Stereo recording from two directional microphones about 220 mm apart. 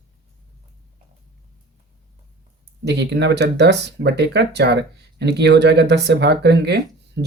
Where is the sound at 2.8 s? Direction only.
50° right (ahead or behind).